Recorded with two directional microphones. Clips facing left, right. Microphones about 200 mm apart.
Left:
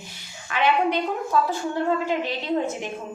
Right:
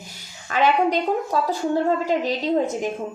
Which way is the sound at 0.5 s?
40° right (ahead or behind).